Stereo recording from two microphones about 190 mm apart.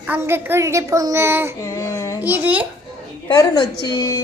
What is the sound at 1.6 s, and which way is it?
Speech, 15° left (ahead or behind).